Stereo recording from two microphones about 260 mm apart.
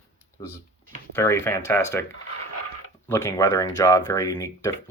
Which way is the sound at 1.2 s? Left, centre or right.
Centre.